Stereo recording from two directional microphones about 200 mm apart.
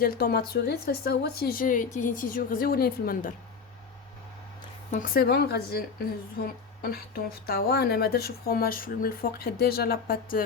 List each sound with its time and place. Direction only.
0.0 s a woman's voice: 50° left (ahead or behind)
4.9 s a woman's voice: 45° left (ahead or behind)